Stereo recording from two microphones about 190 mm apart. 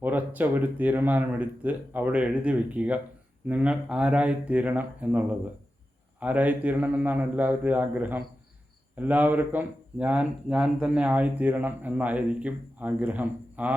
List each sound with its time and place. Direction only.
0.0 s speech: 10° right (ahead or behind)